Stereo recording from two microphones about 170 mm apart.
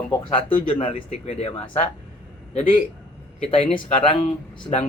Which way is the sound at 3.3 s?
35° left (ahead or behind).